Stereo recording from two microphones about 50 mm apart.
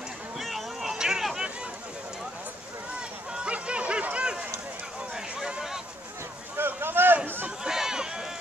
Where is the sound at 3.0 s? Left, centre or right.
Right.